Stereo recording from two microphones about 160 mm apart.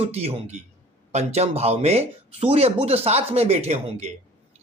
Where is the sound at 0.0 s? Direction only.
40° right (ahead or behind).